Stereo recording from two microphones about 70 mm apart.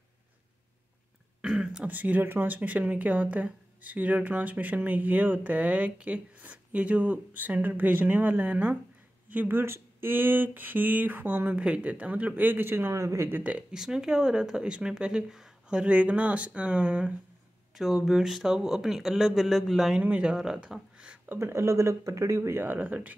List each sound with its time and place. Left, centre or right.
1.4 s throat clearing: centre
1.9 s speech: right
12.9 s speech: right
13.4 s speech: centre
17.7 s speech: centre
20.0 s speech: centre
21.4 s speech: right